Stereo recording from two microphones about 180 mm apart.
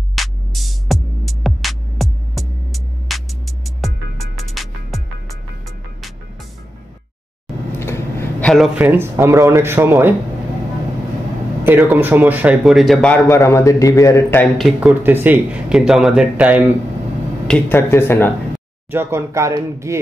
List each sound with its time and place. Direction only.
0.1 s music: centre (ahead or behind)
7.8 s a sound: 15° left (ahead or behind)
8.7 s speech: 10° right (ahead or behind)
11.6 s speech: 10° right (ahead or behind); by 13.4 s 5° left (ahead or behind)
13.4 s a man's voice: 15° left (ahead or behind)
14.6 s speech: 5° right (ahead or behind)
17.5 s a man's voice: 15° left (ahead or behind)
18.9 s speech: 15° right (ahead or behind)